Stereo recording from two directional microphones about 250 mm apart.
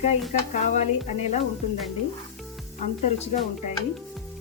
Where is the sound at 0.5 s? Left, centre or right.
Left.